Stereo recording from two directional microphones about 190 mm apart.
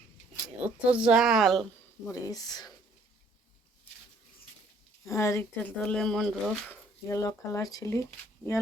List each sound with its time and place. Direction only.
0.6 s a woman's voice: 5° right (ahead or behind)
2.2 s speech: 20° left (ahead or behind)
5.0 s speech: 15° left (ahead or behind)
7.1 s speech: 15° left (ahead or behind)